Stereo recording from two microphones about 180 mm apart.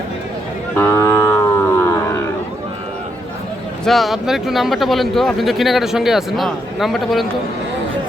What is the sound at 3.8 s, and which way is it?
Speech, centre (ahead or behind).